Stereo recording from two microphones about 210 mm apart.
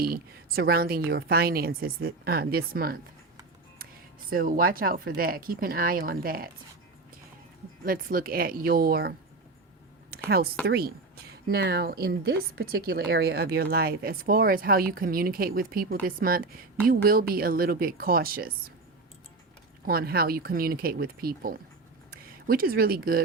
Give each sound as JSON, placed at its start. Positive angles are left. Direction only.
{"t": 0.0, "sound": "speech", "side_deg": -45}
{"t": 4.3, "sound": "speech", "side_deg": -45}
{"t": 7.9, "sound": "speech", "side_deg": -45}
{"t": 10.2, "sound": "speech", "side_deg": -50}
{"t": 19.8, "sound": "speech", "side_deg": -45}